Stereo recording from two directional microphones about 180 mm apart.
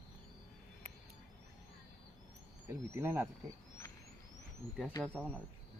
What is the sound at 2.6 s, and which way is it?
Speech, 15° right (ahead or behind).